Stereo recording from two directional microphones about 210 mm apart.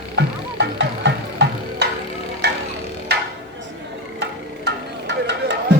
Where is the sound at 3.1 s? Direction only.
55° right (ahead or behind).